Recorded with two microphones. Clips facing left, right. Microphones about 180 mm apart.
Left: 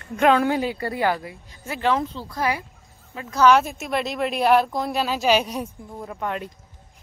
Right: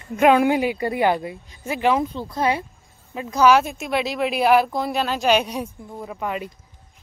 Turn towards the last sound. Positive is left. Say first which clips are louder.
# right 1 dB
turn(degrees=-5)  # may be behind; listen again after turning